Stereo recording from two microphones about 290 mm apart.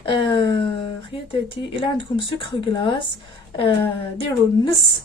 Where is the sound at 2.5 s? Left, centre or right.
Centre.